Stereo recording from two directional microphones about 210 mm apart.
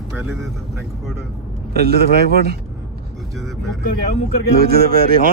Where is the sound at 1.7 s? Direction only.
50° right (ahead or behind).